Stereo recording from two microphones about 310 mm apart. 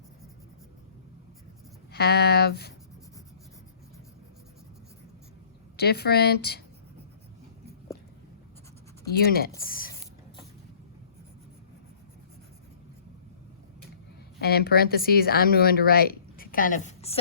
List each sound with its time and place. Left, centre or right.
1.9 s speech: left
5.7 s speech: left
9.0 s speech: left
14.4 s speech: left